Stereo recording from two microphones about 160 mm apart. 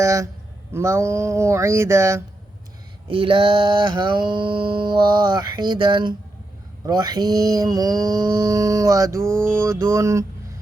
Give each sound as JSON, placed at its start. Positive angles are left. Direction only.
{"t": 0.0, "sound": "speech", "side_deg": -20}
{"t": 3.1, "sound": "mantra", "side_deg": -35}